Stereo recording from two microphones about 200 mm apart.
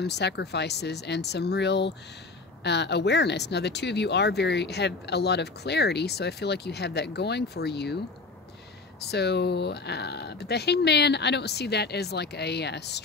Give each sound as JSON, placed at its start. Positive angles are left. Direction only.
{"t": 0.0, "sound": "speech", "side_deg": 60}
{"t": 9.0, "sound": "speech", "side_deg": 55}